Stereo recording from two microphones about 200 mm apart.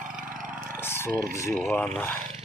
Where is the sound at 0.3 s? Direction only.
45° right (ahead or behind).